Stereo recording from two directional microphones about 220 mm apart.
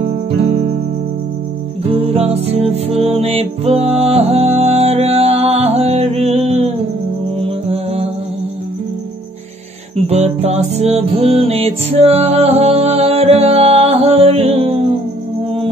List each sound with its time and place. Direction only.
2.0 s music: 30° right (ahead or behind)
7.7 s music: 25° right (ahead or behind)
9.9 s music: 30° right (ahead or behind)